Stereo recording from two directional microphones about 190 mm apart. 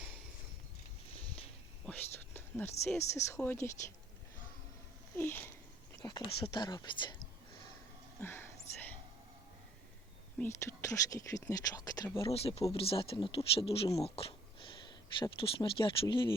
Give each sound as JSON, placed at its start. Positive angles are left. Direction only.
{"t": 1.9, "sound": "speech", "side_deg": 10}
{"t": 5.1, "sound": "speech", "side_deg": 10}
{"t": 8.2, "sound": "a sound", "side_deg": 10}
{"t": 10.3, "sound": "speech", "side_deg": 10}
{"t": 12.2, "sound": "speech", "side_deg": 30}